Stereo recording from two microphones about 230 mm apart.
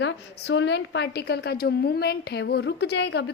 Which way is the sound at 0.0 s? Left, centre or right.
Left.